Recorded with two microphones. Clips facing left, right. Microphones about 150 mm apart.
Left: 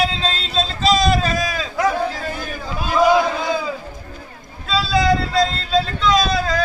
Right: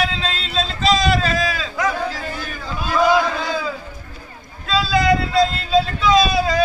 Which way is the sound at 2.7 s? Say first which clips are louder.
Left 1 dB; 15° left (ahead or behind).